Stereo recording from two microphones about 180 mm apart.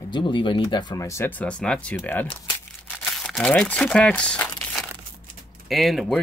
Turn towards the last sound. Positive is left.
turn(degrees=0)  # may be behind; listen again after turning